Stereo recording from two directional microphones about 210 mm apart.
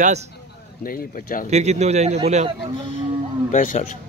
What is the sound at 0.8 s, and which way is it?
Speech, 45° left (ahead or behind).